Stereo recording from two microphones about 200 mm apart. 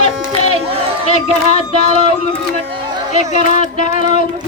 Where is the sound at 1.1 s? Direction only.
35° left (ahead or behind).